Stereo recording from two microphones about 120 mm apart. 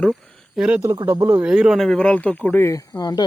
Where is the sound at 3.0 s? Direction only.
35° left (ahead or behind).